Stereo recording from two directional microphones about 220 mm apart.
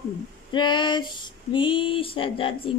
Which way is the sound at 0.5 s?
20° left (ahead or behind).